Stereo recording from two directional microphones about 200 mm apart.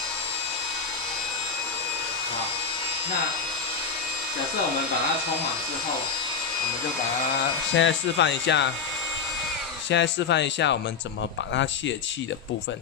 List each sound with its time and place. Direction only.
7.7 s speech: 65° left (ahead or behind)
9.8 s speech: 65° left (ahead or behind)